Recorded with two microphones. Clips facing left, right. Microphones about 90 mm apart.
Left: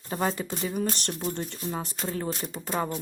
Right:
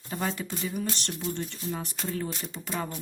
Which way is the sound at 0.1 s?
35° left (ahead or behind).